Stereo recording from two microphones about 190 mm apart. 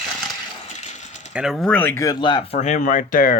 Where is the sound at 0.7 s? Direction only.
35° left (ahead or behind).